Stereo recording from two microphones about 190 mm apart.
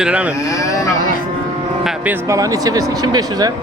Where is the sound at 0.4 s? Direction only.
15° left (ahead or behind).